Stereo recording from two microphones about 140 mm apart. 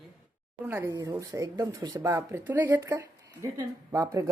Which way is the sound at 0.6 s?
20° right (ahead or behind).